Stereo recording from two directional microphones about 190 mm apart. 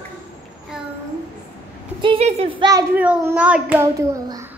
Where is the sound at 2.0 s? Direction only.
30° right (ahead or behind).